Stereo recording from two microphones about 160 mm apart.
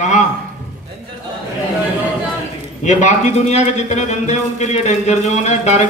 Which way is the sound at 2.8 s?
45° left (ahead or behind).